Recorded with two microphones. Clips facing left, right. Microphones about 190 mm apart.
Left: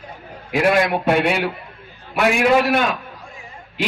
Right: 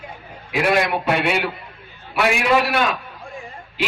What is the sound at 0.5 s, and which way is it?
A man's voice, 45° left (ahead or behind).